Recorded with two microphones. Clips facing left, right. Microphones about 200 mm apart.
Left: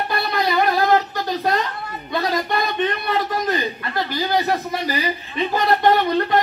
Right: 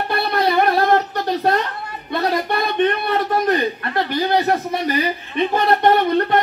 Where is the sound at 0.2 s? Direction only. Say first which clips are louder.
Right 4 dB; 60° right (ahead or behind).